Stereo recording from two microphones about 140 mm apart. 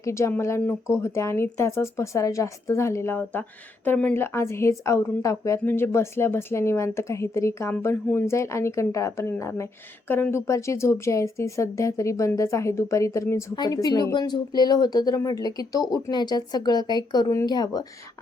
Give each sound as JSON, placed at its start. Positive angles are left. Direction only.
{"t": 0.0, "sound": "speech", "side_deg": 20}